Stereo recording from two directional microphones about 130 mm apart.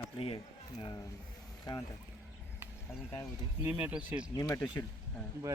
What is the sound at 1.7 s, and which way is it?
Speech, 30° left (ahead or behind).